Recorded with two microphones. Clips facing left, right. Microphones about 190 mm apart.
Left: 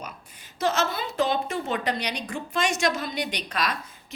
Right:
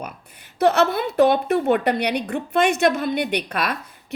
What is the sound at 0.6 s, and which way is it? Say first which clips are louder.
A woman's voice: right 8 dB; 65° right (ahead or behind).